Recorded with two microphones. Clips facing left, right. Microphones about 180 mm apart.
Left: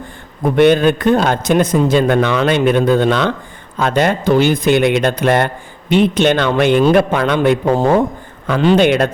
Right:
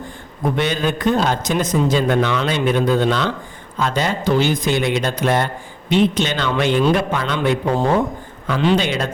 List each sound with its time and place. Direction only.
0.5 s a man's voice: 55° left (ahead or behind)